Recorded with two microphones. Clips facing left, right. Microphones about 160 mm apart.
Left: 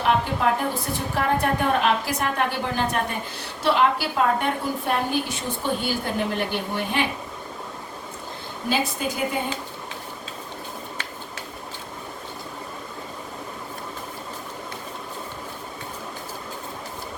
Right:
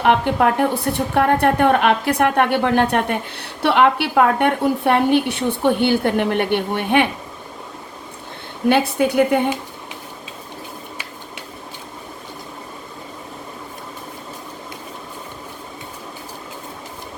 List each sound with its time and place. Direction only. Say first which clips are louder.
0.0 s a woman's voice: right 6 dB; 65° right (ahead or behind)
8.7 s a woman's voice: right 9 dB; 65° right (ahead or behind)